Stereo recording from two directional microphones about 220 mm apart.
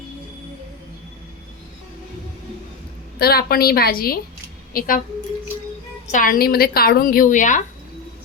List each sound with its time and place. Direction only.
3.2 s a woman's voice: 45° left (ahead or behind)
6.1 s a woman's voice: 40° left (ahead or behind)